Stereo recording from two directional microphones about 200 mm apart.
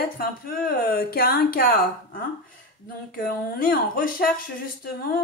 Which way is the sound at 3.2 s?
45° left (ahead or behind).